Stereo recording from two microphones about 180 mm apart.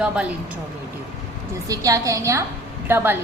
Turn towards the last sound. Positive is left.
turn(degrees=-10)  # may be behind; listen again after turning